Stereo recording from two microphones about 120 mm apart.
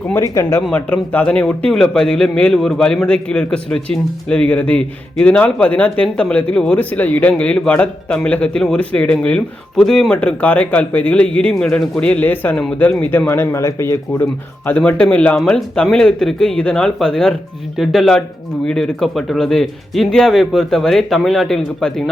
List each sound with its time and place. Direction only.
0.1 s a man's voice: 20° left (ahead or behind)
14.7 s a man's voice: 10° left (ahead or behind)